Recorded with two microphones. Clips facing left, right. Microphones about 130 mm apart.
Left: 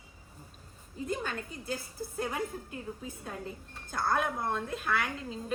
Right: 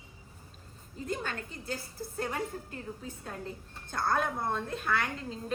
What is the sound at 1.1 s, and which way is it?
A woman's voice, 10° left (ahead or behind).